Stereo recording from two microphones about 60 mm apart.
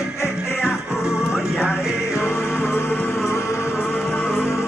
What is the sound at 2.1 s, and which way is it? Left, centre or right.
Music, left.